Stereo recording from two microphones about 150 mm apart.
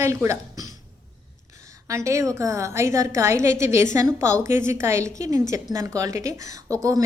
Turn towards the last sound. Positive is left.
turn(degrees=-20)  # may be behind; listen again after turning